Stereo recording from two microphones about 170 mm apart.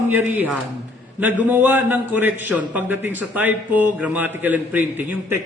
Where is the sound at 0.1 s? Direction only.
10° right (ahead or behind).